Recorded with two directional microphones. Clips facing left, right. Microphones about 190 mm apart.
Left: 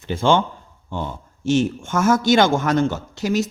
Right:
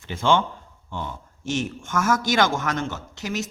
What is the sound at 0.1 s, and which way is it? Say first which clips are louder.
Speech: left 3 dB; 35° left (ahead or behind).